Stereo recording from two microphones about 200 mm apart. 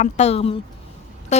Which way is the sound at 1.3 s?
35° left (ahead or behind).